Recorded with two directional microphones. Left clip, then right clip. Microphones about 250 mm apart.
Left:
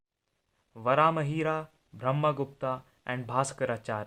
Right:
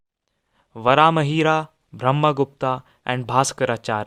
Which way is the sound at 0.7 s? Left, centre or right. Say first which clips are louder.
Right 9 dB; right.